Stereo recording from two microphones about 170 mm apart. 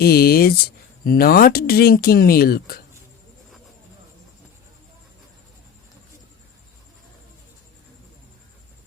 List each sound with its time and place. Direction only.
0.0 s speech: 65° left (ahead or behind)